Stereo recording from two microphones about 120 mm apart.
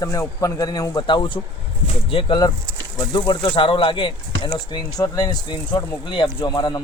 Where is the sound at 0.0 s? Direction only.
25° left (ahead or behind); by 2.4 s 50° left (ahead or behind).